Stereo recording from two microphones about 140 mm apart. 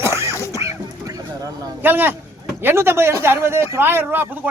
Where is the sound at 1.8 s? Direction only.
15° right (ahead or behind).